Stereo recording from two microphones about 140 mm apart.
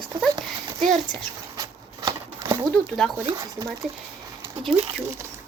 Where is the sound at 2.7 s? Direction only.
5° left (ahead or behind).